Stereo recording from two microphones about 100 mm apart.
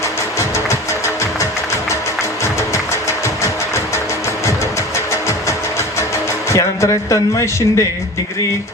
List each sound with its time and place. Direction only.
2.4 s music: 30° left (ahead or behind)
6.5 s a man's voice: 30° left (ahead or behind)